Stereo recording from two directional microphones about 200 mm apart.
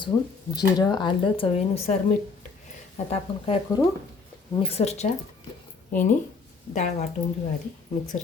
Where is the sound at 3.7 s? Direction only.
15° left (ahead or behind).